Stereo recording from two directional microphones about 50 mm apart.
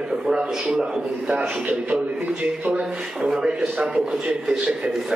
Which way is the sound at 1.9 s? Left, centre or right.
Right.